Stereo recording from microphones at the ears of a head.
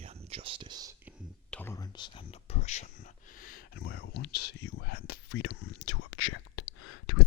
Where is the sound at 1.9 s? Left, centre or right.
Left.